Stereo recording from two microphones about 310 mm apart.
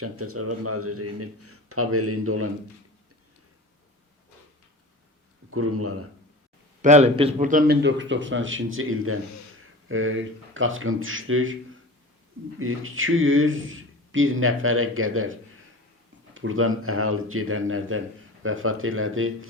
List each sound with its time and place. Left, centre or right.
0.0 s speech: right
5.5 s speech: right
6.8 s speech: right
12.5 s speech: right